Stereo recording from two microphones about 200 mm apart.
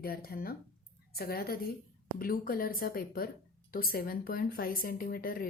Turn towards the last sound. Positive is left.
turn(degrees=45)  # may be behind; listen again after turning